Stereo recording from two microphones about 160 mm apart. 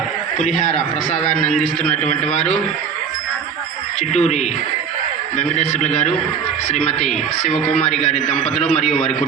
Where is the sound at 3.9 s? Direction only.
45° left (ahead or behind).